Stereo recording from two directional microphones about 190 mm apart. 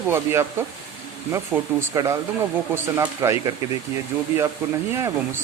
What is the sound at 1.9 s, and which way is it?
Speech, 15° right (ahead or behind).